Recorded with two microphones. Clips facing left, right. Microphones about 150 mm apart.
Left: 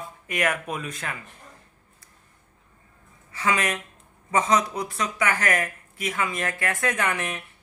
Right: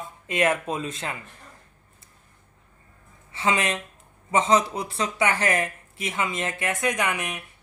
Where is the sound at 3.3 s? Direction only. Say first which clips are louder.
Right 1 dB; 25° right (ahead or behind).